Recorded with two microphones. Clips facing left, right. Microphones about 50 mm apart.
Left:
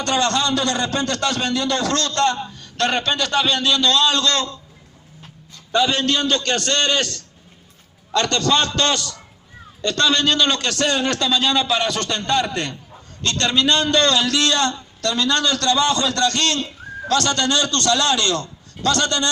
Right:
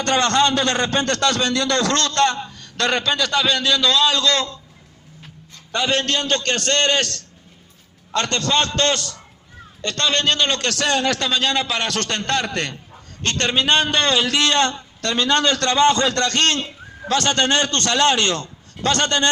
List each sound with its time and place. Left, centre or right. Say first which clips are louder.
0.0 s a man's voice: right 2 dB; right
2.9 s a man's voice: right 1 dB; right
5.7 s a man's voice: left 2 dB; right
8.1 s a man's voice: left 2 dB; right
10.7 s a man's voice: even; right
13.3 s a man's voice: even; right